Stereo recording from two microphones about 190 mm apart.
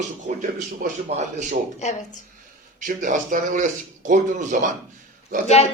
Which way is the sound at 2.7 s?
40° right (ahead or behind).